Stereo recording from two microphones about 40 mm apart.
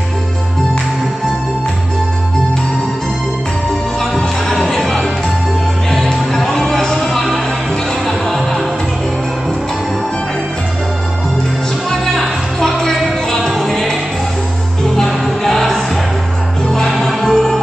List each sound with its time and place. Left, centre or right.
4.5 s music: centre
6.0 s music: centre
7.0 s music: centre
11.9 s music: centre
15.0 s music: centre